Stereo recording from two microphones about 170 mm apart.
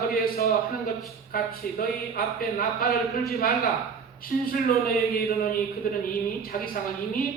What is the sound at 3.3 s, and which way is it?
Speech, 60° left (ahead or behind).